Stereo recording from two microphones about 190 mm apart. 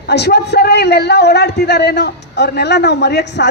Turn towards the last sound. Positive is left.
turn(degrees=60)  # may be behind; listen again after turning